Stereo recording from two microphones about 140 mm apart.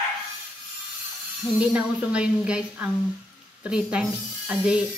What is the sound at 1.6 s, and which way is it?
A woman's voice, 10° right (ahead or behind).